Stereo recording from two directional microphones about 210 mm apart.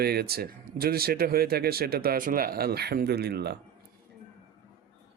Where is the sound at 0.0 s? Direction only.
50° right (ahead or behind).